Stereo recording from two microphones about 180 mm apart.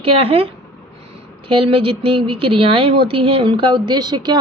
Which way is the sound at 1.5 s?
30° right (ahead or behind).